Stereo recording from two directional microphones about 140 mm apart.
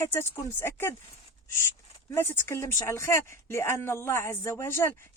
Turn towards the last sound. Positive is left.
turn(degrees=15)  # may be behind; listen again after turning